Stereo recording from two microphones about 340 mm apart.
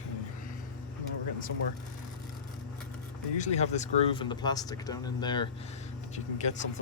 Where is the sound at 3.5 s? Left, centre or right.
Centre.